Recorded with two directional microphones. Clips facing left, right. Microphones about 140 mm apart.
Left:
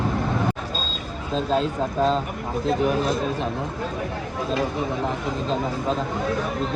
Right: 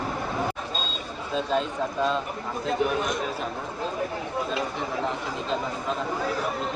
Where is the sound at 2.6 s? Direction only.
35° left (ahead or behind).